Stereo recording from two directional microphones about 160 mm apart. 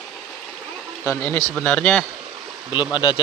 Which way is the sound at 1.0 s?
15° left (ahead or behind).